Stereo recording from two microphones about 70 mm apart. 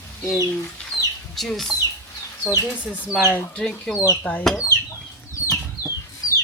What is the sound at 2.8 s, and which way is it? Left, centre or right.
Speech, centre.